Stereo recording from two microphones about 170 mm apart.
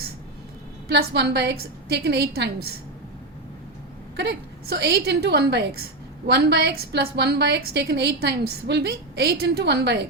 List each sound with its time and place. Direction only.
0.9 s a woman's voice: 80° right
4.2 s a woman's voice: 75° right (ahead or behind)